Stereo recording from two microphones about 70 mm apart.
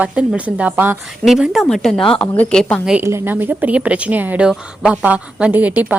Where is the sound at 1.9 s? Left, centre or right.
Centre.